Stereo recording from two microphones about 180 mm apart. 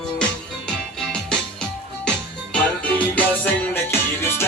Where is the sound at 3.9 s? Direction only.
15° left (ahead or behind).